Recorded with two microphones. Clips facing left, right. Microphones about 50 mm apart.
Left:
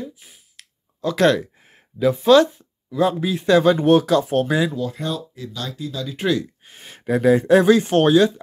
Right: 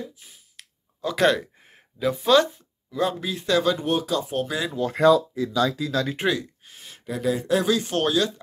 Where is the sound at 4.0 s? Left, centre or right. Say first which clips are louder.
Left 7 dB; left.